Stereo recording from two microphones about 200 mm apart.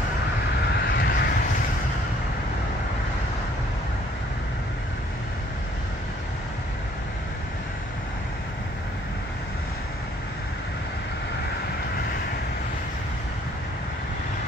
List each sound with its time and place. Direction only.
0.7 s vehicle: 55° left (ahead or behind)